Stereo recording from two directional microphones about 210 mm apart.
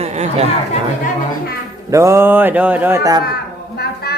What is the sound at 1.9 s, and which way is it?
Mantra, 15° right (ahead or behind).